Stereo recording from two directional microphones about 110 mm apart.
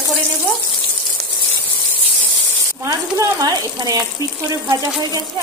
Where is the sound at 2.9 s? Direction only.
35° right (ahead or behind).